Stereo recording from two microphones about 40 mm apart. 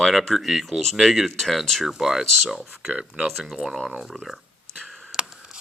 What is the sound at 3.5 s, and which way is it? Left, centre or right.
Speech, centre.